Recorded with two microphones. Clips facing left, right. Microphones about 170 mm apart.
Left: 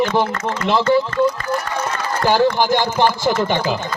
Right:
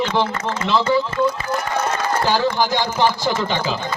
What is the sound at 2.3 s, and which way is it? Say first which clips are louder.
A man's voice: left 6 dB; 55° left (ahead or behind).